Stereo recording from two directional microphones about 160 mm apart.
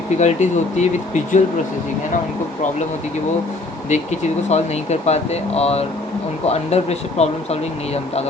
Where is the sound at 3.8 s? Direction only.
45° left (ahead or behind).